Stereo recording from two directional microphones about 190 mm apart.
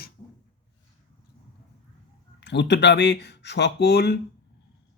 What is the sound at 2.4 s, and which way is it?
Speech, 65° left (ahead or behind).